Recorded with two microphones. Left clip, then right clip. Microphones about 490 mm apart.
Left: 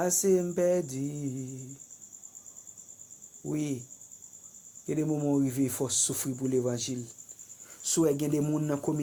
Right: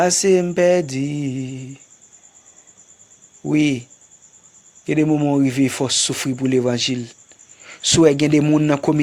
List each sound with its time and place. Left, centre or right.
0.0 s speech: centre
3.4 s speech: centre
4.9 s speech: centre